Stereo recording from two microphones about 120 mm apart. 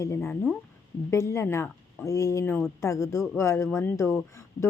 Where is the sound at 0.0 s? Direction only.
20° left (ahead or behind).